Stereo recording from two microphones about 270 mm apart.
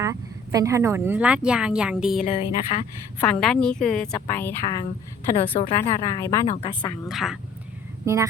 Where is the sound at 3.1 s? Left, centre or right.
Centre.